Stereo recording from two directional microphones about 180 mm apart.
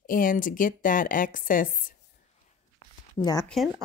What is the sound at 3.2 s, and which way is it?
Speech, 20° left (ahead or behind).